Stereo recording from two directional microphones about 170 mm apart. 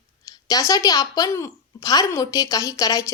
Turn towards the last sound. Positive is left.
turn(degrees=20)  # may be behind; listen again after turning